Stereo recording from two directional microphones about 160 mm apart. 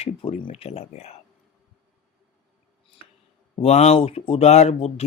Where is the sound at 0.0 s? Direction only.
40° left (ahead or behind).